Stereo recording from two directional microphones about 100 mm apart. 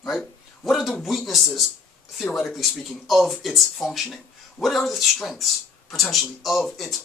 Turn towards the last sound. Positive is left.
turn(degrees=0)  # may be behind; listen again after turning